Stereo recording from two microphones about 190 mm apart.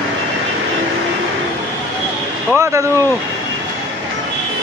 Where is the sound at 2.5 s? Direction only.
15° right (ahead or behind).